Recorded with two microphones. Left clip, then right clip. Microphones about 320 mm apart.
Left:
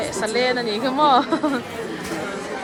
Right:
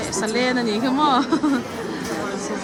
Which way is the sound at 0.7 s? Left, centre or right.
Centre.